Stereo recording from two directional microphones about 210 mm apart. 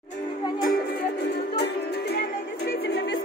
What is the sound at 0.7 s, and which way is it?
Music, 50° left (ahead or behind).